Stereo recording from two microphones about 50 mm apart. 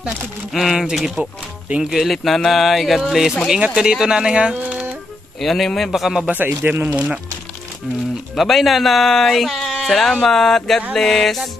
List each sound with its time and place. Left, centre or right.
0.5 s speech: centre
5.4 s speech: centre
6.3 s speech: right
8.4 s speech: centre
9.6 s a sound: centre
10.2 s speech: centre